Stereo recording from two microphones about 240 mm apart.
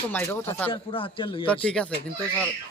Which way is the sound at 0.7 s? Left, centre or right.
Left.